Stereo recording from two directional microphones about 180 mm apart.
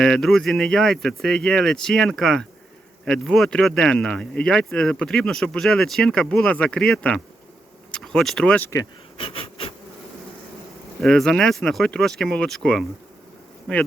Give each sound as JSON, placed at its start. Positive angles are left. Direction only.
{"t": 0.0, "sound": "speech", "side_deg": 0}
{"t": 9.1, "sound": "a sound", "side_deg": 30}
{"t": 11.0, "sound": "speech", "side_deg": 5}